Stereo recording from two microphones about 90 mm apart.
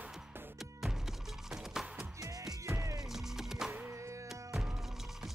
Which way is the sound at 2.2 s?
45° right (ahead or behind).